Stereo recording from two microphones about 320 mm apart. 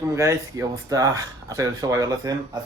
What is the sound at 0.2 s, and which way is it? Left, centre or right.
Speech, centre.